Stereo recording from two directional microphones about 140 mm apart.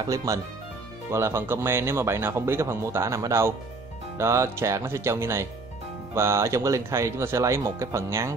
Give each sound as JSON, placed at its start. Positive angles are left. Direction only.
{"t": 0.1, "sound": "speech", "side_deg": -25}